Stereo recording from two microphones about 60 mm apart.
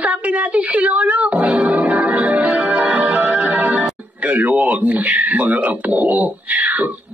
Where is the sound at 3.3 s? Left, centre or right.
Right.